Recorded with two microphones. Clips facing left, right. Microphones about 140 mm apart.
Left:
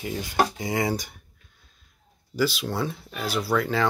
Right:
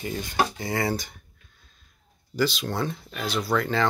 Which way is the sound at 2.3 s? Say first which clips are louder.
Even; 5° left (ahead or behind).